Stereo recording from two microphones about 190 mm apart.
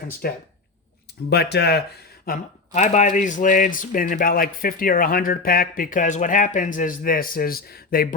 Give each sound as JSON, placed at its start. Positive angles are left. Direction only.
{"t": 0.2, "sound": "speech", "side_deg": 55}